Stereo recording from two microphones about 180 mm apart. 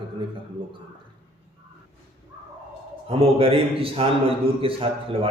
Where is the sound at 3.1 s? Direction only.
30° right (ahead or behind).